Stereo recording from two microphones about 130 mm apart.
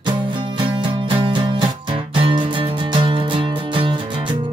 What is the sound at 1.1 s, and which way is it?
Music, 40° right (ahead or behind).